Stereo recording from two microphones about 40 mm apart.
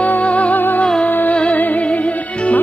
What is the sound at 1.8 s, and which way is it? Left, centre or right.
Music, left.